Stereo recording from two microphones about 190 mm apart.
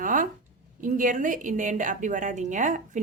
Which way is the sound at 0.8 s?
45° right (ahead or behind).